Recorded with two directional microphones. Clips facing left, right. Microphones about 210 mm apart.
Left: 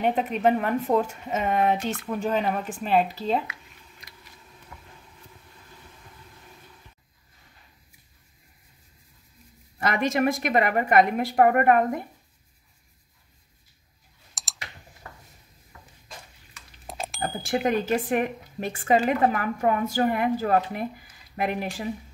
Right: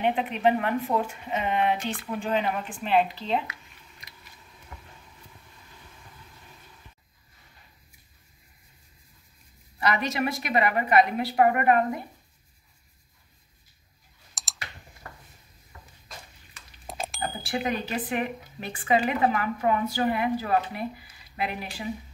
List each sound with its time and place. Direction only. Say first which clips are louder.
0.0 s a woman's voice: left 1 dB; 40° left (ahead or behind)
9.8 s a woman's voice: left 3 dB; 50° left (ahead or behind)
14.3 s clicking: even; centre (ahead or behind)
16.8 s smoke detector: left 1 dB; centre (ahead or behind)
17.4 s a woman's voice: left 5 dB; 45° left (ahead or behind)